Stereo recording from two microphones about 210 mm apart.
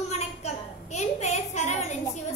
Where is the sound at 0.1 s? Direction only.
30° left (ahead or behind).